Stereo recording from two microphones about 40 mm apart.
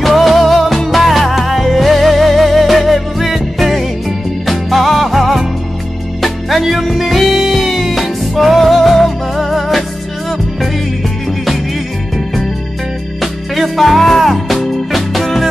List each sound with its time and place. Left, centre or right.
0.0 s music: centre
13.2 s music: centre